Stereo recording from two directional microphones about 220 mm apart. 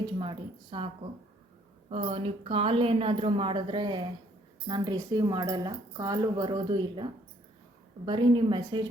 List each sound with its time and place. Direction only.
0.0 s speech: 20° right (ahead or behind)
1.9 s speech: 25° right (ahead or behind)